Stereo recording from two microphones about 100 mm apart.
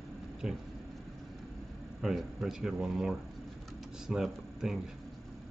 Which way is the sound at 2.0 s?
5° right (ahead or behind).